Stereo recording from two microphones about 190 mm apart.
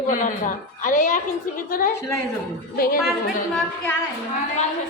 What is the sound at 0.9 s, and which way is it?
Speech, 40° left (ahead or behind).